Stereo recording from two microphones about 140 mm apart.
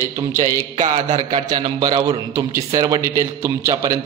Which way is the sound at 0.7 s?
60° right (ahead or behind).